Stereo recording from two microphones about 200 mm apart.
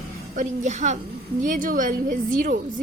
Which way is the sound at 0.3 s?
35° right (ahead or behind).